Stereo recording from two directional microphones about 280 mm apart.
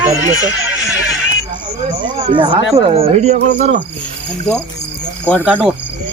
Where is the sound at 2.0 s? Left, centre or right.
Centre.